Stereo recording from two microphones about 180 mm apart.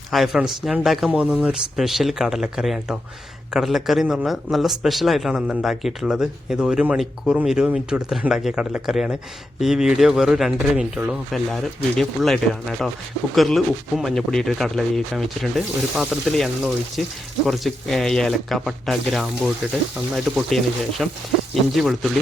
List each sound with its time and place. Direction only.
0.1 s speech: centre (ahead or behind)